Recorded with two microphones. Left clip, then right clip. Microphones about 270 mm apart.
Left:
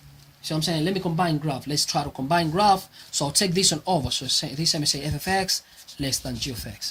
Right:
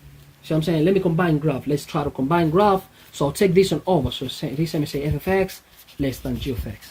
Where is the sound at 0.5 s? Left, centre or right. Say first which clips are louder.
Right 6 dB; left.